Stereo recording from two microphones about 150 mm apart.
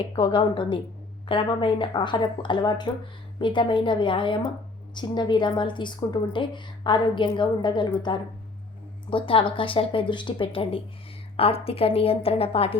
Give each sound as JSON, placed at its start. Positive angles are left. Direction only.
{"t": 0.2, "sound": "a woman's voice", "side_deg": 35}